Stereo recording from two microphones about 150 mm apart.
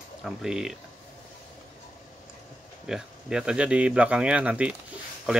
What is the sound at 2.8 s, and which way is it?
Speech, 5° right (ahead or behind).